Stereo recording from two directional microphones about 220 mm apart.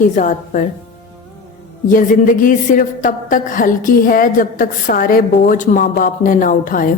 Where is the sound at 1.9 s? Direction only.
40° left (ahead or behind).